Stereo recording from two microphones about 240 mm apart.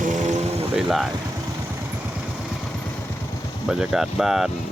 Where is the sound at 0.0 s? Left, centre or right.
Right.